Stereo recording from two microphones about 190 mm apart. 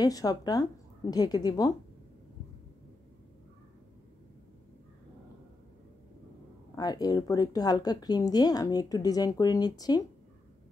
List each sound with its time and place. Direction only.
0.0 s speech: 20° left (ahead or behind)
6.7 s speech: 20° left (ahead or behind)